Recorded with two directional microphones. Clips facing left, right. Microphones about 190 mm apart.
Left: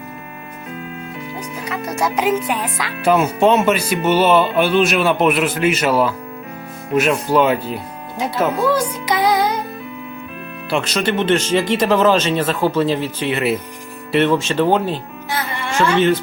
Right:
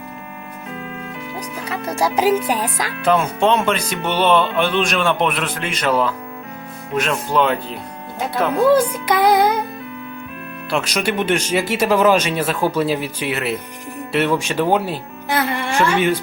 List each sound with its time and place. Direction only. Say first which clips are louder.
1.6 s speech: right 1 dB; 30° right (ahead or behind)
3.0 s speech: left 3 dB; 10° left (ahead or behind)
9.0 s music: right 1 dB; 55° right (ahead or behind)
10.7 s speech: left 2 dB; 10° right (ahead or behind)